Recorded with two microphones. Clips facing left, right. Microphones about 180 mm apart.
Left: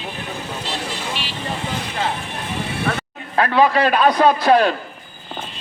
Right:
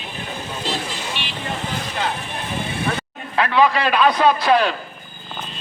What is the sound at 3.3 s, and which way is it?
A man's voice, 45° left (ahead or behind).